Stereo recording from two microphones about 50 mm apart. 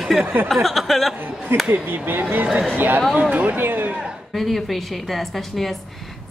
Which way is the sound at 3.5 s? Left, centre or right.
Right.